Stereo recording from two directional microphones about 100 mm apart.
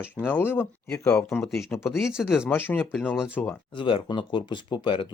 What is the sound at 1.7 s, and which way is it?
Speech, 25° left (ahead or behind).